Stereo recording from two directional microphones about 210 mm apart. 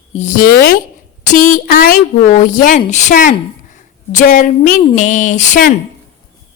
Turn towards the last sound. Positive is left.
turn(degrees=40)  # may be behind; listen again after turning